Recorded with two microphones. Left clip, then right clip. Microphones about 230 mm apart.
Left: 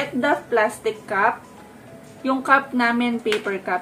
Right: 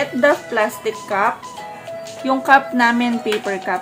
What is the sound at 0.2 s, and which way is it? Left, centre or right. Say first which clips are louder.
Speech: right 3 dB; right.